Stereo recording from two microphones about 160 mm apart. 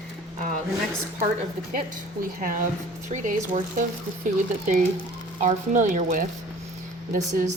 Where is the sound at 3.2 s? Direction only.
55° right (ahead or behind).